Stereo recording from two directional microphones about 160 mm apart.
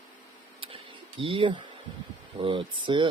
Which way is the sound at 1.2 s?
35° right (ahead or behind).